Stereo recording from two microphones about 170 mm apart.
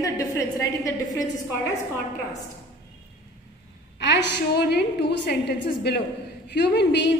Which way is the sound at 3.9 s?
90° left.